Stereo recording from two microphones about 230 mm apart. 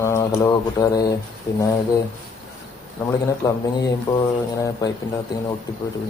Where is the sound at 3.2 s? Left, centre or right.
Centre.